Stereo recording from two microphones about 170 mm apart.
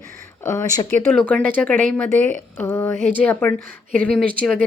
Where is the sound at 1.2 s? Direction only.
5° left (ahead or behind).